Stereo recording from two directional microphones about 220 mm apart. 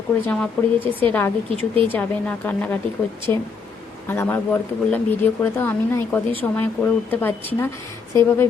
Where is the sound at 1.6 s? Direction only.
25° right (ahead or behind).